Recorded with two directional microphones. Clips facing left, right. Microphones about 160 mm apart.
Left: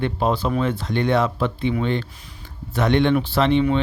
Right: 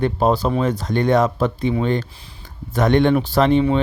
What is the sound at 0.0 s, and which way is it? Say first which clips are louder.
Speech: right 4 dB; 40° right (ahead or behind).